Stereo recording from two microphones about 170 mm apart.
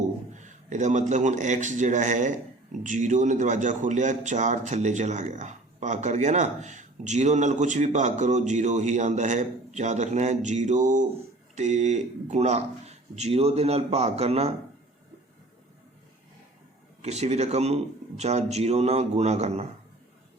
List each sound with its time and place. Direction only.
0.3 s a man's voice: 45° right (ahead or behind)
17.0 s speech: 40° right (ahead or behind)